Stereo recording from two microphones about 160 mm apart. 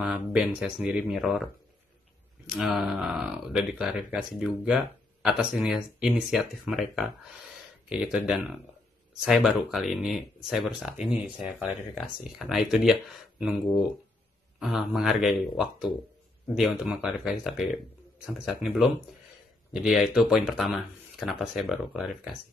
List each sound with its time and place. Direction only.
0.0 s speech: 5° right (ahead or behind)
14.6 s a man's voice: centre (ahead or behind)